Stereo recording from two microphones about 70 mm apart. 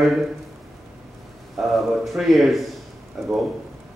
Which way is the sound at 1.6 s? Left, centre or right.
Centre.